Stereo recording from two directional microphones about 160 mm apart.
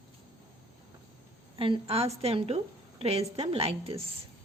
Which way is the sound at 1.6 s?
35° right (ahead or behind).